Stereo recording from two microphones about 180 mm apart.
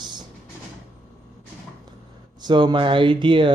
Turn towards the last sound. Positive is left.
turn(degrees=-25)  # may be behind; listen again after turning